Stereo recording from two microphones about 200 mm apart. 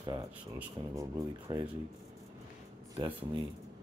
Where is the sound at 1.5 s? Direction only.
20° right (ahead or behind).